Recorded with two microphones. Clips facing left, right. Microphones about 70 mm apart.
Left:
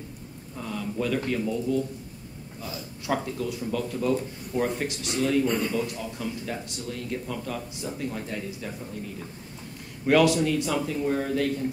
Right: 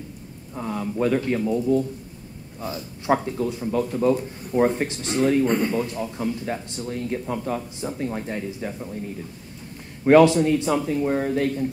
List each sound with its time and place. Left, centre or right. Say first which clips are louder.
0.6 s speech: right 5 dB; right
10.0 s speech: right 6 dB; right